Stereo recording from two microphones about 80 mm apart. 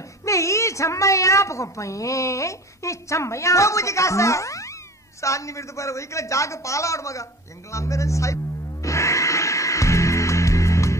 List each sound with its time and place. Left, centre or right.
0.2 s a woman's voice: left
8.8 s music: left